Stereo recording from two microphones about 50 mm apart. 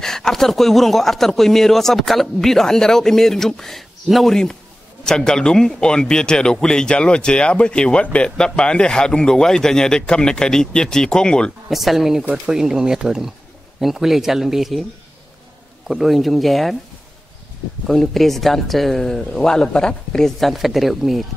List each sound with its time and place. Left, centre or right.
0.0 s speech: centre
11.7 s speech: centre
15.9 s speech: centre
17.8 s speech: centre